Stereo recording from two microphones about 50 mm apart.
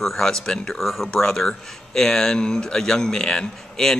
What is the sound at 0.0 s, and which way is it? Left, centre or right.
Speech, centre.